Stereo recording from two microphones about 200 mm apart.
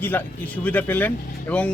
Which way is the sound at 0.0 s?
10° left (ahead or behind).